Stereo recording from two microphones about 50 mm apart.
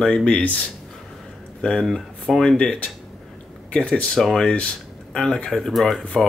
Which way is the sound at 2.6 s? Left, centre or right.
Left.